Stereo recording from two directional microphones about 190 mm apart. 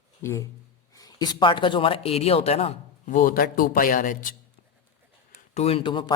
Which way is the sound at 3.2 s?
50° left (ahead or behind).